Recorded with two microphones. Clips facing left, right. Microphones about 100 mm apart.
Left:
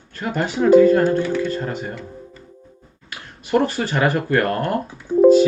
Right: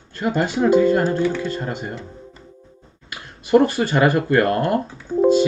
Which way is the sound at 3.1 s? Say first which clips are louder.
Right 4 dB; 20° right (ahead or behind).